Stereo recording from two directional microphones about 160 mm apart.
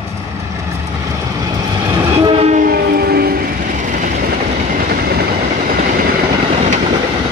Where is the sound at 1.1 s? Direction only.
25° right (ahead or behind); by 2.6 s 45° right (ahead or behind).